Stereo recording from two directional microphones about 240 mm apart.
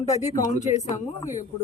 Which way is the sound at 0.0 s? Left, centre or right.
Left.